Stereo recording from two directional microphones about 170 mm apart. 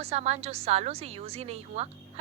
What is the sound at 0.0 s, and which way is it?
A woman's voice, 40° right (ahead or behind).